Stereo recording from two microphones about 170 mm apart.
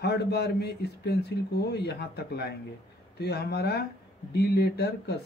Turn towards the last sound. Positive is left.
turn(degrees=70)  # may be behind; listen again after turning